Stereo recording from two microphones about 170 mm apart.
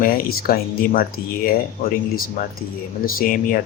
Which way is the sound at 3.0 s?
55° left (ahead or behind).